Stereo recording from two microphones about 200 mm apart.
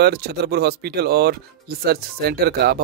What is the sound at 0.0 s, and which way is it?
Speech, 50° right (ahead or behind).